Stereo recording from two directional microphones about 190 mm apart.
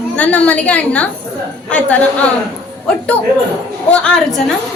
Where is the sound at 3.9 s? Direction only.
5° left (ahead or behind).